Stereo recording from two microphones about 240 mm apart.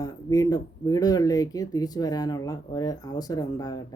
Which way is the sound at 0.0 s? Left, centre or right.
Centre.